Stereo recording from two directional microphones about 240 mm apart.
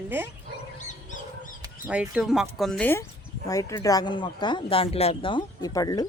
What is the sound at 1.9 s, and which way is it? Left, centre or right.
Speech, centre.